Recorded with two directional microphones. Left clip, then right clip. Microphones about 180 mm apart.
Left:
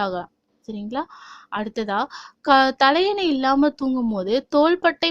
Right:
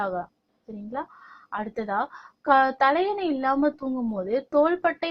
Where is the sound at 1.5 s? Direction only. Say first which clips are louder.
Left 3 dB; 25° left (ahead or behind).